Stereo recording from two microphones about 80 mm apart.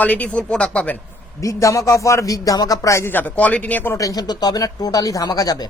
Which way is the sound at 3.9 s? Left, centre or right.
Left.